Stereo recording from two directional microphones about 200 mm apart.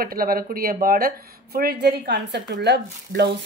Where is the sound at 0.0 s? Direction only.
45° right (ahead or behind).